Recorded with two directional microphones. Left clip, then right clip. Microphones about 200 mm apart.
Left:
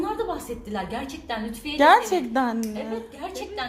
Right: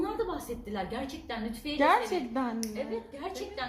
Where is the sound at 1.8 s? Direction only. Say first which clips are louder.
Left 9 dB; 50° left (ahead or behind).